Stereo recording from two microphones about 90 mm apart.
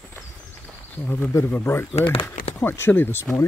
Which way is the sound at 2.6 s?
25° left (ahead or behind).